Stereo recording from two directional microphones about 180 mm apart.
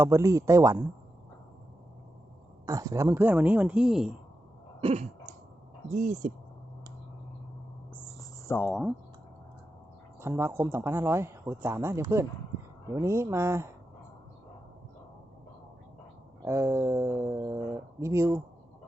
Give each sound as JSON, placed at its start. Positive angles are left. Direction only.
{"t": 0.0, "sound": "speech", "side_deg": -15}
{"t": 2.6, "sound": "speech", "side_deg": -20}
{"t": 4.8, "sound": "throat clearing", "side_deg": -35}
{"t": 6.0, "sound": "speech", "side_deg": -40}
{"t": 7.9, "sound": "cricket", "side_deg": 10}
{"t": 10.2, "sound": "speech", "side_deg": -15}
{"t": 16.4, "sound": "speech", "side_deg": -15}